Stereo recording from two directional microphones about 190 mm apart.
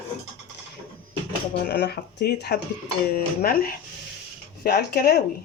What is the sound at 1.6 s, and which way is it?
Speech, 55° left (ahead or behind).